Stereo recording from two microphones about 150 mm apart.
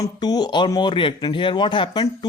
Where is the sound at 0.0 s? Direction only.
30° left (ahead or behind).